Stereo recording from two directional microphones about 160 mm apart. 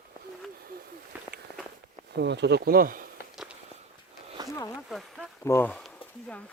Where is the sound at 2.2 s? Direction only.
90° right; by 3.0 s 60° right (ahead or behind).